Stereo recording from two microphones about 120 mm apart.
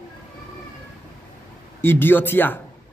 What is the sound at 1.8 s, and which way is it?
Speech, 15° left (ahead or behind).